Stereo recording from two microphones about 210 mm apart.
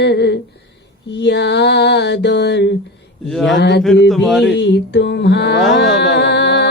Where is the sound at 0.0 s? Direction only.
55° left (ahead or behind).